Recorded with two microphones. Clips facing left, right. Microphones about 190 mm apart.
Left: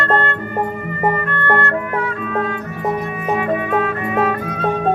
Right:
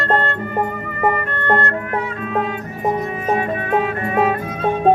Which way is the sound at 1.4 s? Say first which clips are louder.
Even; 15° right (ahead or behind).